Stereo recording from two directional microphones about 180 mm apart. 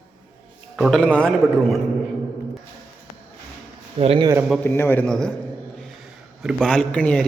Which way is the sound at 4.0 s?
30° right (ahead or behind).